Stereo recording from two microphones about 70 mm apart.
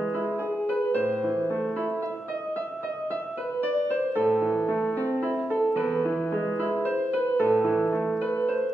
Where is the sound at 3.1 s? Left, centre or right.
Centre.